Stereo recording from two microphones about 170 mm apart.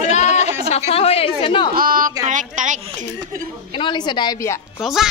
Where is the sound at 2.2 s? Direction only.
50° right (ahead or behind).